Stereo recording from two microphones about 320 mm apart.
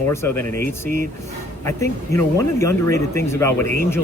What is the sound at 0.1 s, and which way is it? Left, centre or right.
Speech, centre.